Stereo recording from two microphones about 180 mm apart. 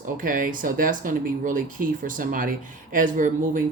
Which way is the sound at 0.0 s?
50° right (ahead or behind).